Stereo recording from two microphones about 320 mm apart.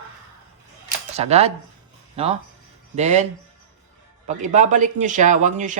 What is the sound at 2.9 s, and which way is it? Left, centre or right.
Speech, right.